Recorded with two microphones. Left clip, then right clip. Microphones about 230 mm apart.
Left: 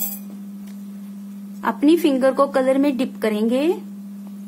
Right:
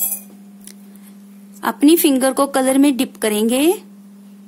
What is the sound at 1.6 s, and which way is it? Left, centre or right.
A woman's voice, right.